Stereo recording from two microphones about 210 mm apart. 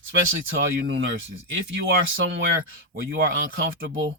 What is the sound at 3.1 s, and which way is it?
Speech, 60° right (ahead or behind).